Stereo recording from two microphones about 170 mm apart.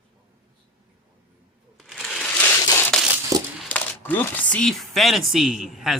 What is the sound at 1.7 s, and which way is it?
Crushing, centre (ahead or behind).